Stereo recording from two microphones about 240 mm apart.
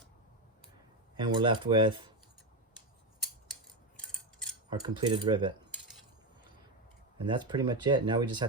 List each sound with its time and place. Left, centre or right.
1.1 s speech: centre
4.7 s speech: centre
7.2 s speech: centre